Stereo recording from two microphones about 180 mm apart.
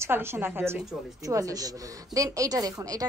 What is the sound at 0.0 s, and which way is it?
A woman's voice, 15° right (ahead or behind).